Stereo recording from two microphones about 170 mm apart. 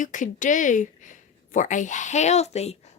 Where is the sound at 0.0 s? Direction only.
50° left (ahead or behind).